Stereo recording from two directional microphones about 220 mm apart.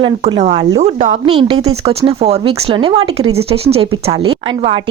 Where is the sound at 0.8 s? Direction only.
30° right (ahead or behind).